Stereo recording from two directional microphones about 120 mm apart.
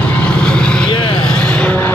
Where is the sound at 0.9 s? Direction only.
45° left (ahead or behind).